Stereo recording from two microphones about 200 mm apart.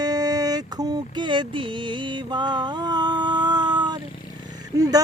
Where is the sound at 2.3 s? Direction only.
20° right (ahead or behind).